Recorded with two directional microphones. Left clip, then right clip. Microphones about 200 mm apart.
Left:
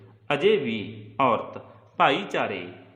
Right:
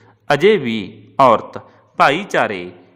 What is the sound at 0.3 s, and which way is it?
A man's voice, 45° right (ahead or behind).